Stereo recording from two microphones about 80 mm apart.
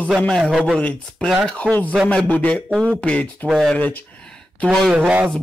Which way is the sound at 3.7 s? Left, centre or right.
Centre.